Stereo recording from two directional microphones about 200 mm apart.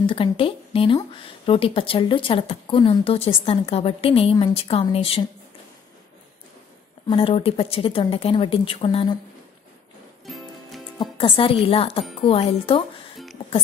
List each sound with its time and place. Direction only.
0.0 s a woman's voice: 25° left (ahead or behind)
7.1 s a woman's voice: 25° left (ahead or behind)
10.2 s music: centre (ahead or behind)
11.0 s a woman's voice: 25° left (ahead or behind)